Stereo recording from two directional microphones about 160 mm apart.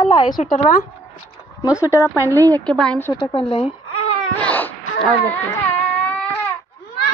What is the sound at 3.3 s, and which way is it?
Speech, 35° left (ahead or behind).